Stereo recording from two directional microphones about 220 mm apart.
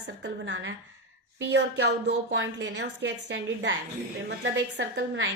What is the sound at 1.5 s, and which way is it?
A woman's voice, 50° right (ahead or behind).